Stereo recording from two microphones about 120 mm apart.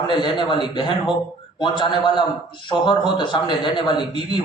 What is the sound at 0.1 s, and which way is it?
A man's voice, 40° left (ahead or behind).